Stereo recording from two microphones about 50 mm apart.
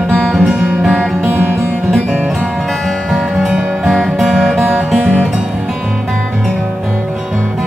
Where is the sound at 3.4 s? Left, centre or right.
Centre.